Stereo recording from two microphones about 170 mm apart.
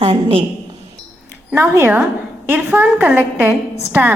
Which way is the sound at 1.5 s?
10° right (ahead or behind).